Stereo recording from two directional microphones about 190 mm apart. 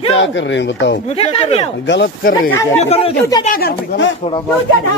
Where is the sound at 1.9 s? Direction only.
55° left (ahead or behind).